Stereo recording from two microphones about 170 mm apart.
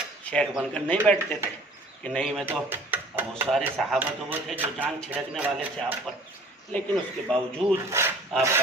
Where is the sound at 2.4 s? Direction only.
10° right (ahead or behind).